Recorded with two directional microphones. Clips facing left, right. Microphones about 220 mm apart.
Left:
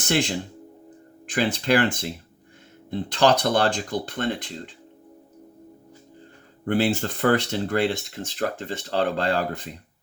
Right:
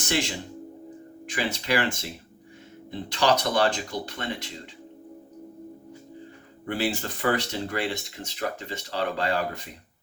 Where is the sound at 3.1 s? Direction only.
50° left (ahead or behind).